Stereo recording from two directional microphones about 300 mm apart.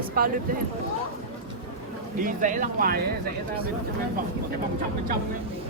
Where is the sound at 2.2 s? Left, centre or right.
Right.